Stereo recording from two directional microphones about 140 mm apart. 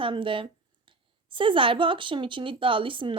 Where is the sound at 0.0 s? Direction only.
35° right (ahead or behind).